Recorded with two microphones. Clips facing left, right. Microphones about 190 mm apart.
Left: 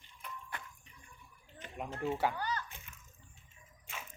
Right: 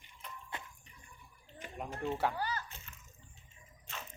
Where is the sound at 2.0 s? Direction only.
5° left (ahead or behind).